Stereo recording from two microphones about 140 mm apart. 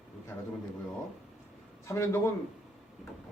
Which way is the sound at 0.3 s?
5° left (ahead or behind).